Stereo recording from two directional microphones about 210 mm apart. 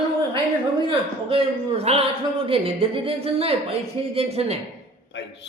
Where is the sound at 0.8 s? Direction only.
25° right (ahead or behind).